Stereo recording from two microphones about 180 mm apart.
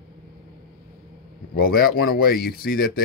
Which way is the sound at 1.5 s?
55° left (ahead or behind).